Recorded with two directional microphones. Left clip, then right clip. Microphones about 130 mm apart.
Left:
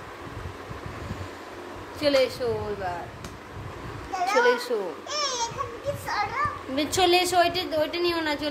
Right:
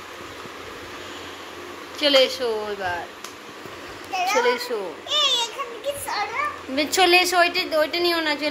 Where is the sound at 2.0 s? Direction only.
5° right (ahead or behind).